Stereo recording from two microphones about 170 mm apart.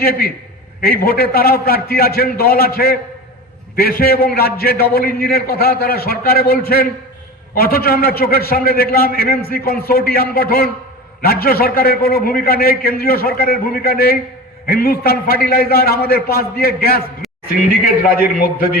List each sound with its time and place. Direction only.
0.0 s a man's voice: 60° left (ahead or behind)